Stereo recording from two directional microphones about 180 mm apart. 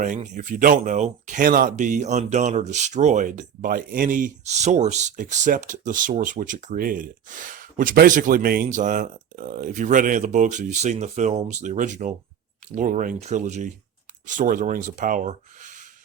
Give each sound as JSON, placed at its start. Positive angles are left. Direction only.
{"t": 0.0, "sound": "speech", "side_deg": -45}